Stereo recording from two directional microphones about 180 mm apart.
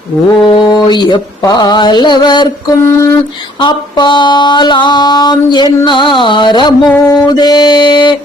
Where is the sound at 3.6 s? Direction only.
25° left (ahead or behind).